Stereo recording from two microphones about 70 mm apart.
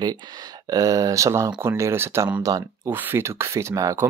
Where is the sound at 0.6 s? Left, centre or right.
Right.